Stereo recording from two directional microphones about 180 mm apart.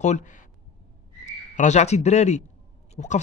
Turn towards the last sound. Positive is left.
turn(degrees=40)  # may be behind; listen again after turning